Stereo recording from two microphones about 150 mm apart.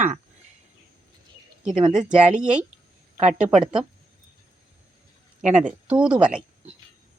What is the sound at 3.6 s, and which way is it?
Speech, 5° right (ahead or behind).